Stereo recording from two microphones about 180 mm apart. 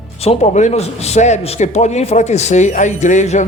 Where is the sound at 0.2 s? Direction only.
35° left (ahead or behind).